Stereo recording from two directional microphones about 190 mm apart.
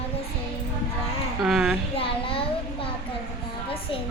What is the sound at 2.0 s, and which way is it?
Speech, 30° left (ahead or behind).